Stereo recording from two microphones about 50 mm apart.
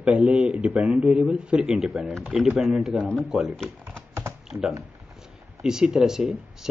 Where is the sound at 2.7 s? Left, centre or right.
Centre.